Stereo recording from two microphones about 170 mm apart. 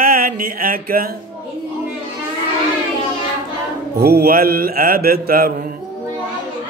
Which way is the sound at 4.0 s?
65° right (ahead or behind).